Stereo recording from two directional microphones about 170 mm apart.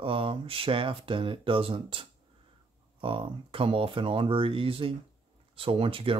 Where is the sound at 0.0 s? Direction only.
30° right (ahead or behind).